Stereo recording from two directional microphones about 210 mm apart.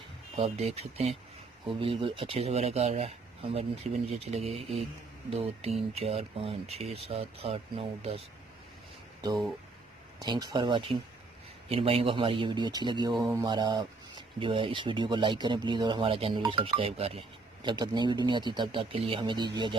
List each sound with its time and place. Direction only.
0.3 s speech: 30° right (ahead or behind)
10.2 s speech: 20° right (ahead or behind)